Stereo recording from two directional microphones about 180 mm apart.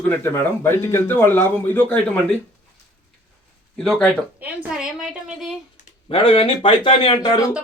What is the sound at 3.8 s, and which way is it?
A woman's voice, centre (ahead or behind).